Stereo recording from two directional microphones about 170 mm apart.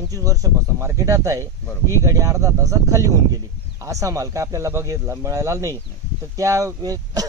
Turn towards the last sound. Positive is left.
turn(degrees=-20)  # may be behind; listen again after turning